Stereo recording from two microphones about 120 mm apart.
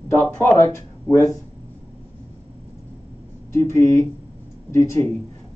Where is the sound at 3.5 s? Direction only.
25° left (ahead or behind).